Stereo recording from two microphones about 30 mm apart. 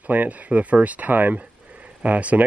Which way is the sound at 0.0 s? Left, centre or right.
Right.